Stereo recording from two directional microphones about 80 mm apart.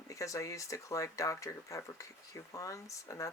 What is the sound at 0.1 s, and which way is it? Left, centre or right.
Speech, left.